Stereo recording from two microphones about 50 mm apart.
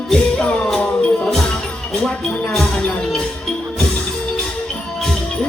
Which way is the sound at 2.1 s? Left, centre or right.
Centre.